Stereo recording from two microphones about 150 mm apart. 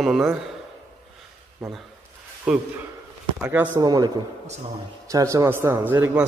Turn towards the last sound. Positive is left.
turn(degrees=-10)  # may be behind; listen again after turning